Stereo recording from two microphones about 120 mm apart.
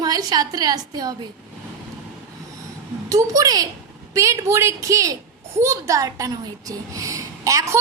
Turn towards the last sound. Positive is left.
turn(degrees=-25)  # may be behind; listen again after turning